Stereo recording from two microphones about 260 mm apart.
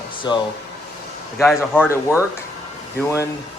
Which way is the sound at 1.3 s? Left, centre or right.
Centre.